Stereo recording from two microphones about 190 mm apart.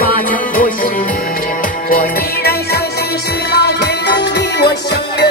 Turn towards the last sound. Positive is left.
turn(degrees=60)  # may be behind; listen again after turning